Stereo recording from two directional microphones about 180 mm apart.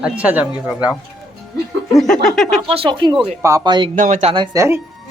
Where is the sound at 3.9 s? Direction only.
45° right (ahead or behind).